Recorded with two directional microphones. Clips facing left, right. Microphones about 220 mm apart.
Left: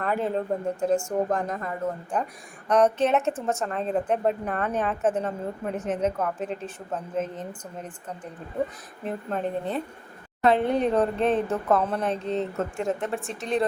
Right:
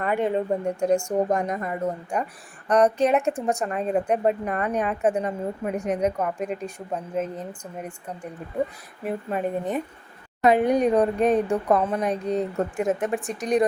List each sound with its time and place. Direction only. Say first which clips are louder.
0.0 s speech: right 3 dB; 5° right (ahead or behind)
1.4 s speech: right 3 dB; 15° right (ahead or behind)